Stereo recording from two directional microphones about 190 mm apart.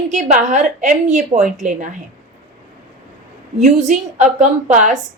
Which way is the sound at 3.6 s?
35° right (ahead or behind).